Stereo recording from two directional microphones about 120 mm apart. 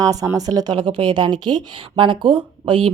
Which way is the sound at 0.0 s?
30° right (ahead or behind).